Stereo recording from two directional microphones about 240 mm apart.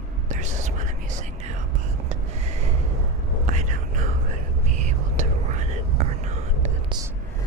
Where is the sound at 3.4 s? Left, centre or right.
Right.